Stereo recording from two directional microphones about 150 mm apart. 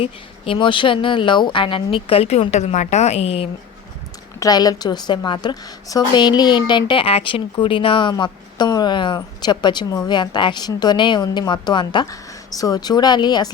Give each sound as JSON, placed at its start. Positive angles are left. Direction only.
{"t": 0.0, "sound": "a woman's voice", "side_deg": 40}
{"t": 4.4, "sound": "a woman's voice", "side_deg": 25}